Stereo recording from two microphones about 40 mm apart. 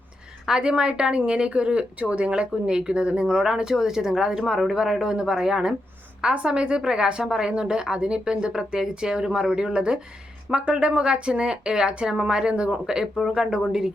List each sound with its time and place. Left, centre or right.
0.4 s a woman's voice: centre